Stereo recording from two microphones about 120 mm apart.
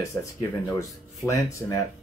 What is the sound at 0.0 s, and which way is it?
Speech, 30° left (ahead or behind).